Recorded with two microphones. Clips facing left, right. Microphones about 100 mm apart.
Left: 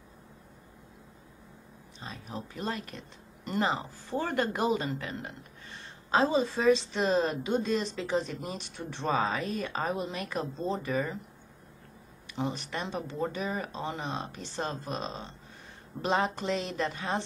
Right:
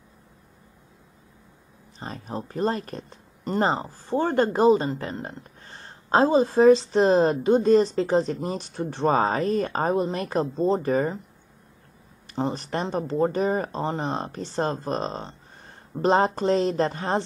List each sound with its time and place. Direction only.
2.0 s speech: 40° right (ahead or behind)
12.3 s speech: 40° right (ahead or behind)